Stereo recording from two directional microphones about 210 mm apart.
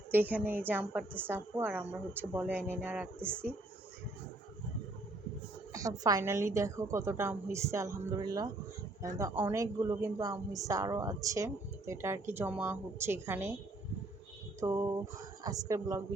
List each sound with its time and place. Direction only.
0.1 s a woman's voice: 10° right (ahead or behind)
5.7 s a woman's voice: 15° right (ahead or behind)
14.6 s a woman's voice: 15° right (ahead or behind)